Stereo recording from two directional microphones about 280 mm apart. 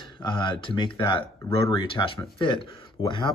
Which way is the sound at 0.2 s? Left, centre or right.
Centre.